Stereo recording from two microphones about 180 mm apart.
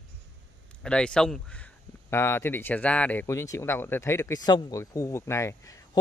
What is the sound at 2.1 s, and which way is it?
Speech, 15° left (ahead or behind).